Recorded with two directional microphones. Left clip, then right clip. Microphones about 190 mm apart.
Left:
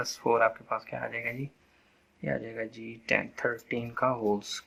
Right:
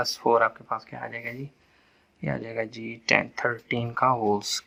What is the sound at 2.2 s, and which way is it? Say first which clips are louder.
Speech: right 3 dB; 30° right (ahead or behind).